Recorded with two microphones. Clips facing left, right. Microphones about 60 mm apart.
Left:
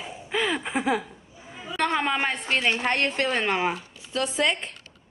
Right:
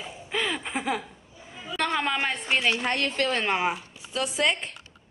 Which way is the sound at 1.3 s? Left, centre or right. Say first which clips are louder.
Left 2 dB; centre.